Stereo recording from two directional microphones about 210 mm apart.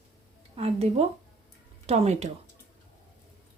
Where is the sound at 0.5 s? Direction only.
30° right (ahead or behind).